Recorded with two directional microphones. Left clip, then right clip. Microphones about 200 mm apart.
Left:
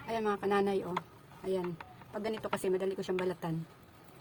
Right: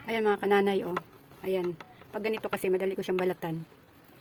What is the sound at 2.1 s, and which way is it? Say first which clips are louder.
A woman's voice: right 4 dB; 25° right (ahead or behind).